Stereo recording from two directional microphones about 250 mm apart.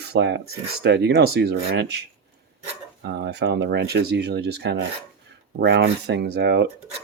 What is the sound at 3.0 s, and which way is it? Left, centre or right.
Speech, right.